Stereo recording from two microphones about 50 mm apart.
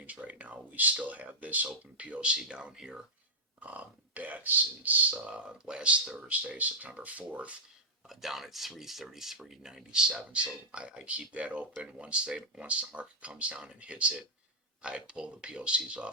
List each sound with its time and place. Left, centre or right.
0.0 s speech: right; by 3.0 s centre
3.6 s speech: right
5.2 s speech: right
8.0 s speech: centre; by 16.0 s right